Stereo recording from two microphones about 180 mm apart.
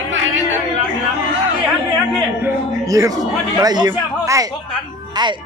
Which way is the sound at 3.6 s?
20° right (ahead or behind).